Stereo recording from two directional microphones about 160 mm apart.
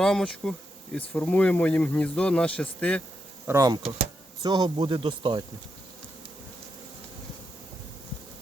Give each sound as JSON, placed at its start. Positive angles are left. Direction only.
{"t": 0.0, "sound": "bee", "side_deg": 5}
{"t": 0.9, "sound": "speech", "side_deg": 10}
{"t": 3.4, "sound": "speech", "side_deg": -20}